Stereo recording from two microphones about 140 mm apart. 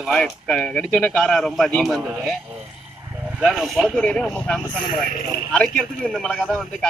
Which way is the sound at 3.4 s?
Centre (ahead or behind).